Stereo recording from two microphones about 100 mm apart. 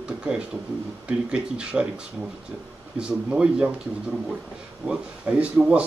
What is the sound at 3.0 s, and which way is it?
Speech, 10° right (ahead or behind).